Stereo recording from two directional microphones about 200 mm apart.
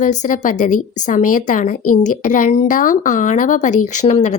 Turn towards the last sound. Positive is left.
turn(degrees=35)  # may be behind; listen again after turning